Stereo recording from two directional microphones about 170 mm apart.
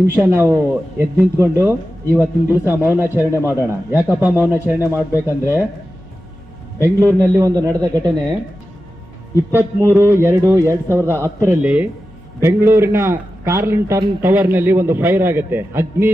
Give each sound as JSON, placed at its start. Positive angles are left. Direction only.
{"t": 0.0, "sound": "speech", "side_deg": -15}
{"t": 6.8, "sound": "a man's voice", "side_deg": -15}
{"t": 9.5, "sound": "speech", "side_deg": -15}